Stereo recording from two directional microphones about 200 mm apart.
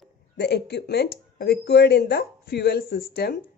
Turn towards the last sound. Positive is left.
turn(degrees=50)  # may be behind; listen again after turning